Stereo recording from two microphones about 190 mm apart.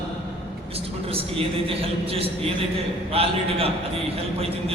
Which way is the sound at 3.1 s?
30° right (ahead or behind).